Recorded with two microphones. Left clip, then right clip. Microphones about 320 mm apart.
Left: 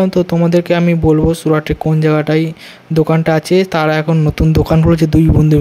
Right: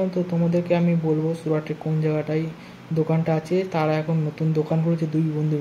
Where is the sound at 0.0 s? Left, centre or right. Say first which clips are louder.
Left 11 dB; left.